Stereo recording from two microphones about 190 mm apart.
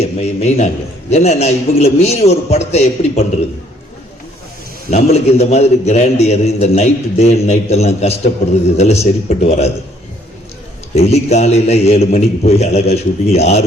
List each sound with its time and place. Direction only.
0.0 s a man's voice: 35° left (ahead or behind)
4.9 s a man's voice: 35° left (ahead or behind)
10.9 s a man's voice: 35° left (ahead or behind)